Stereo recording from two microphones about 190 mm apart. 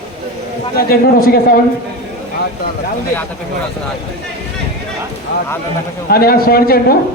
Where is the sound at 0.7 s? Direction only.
50° left (ahead or behind).